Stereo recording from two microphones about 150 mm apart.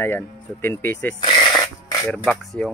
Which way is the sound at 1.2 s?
35° left (ahead or behind).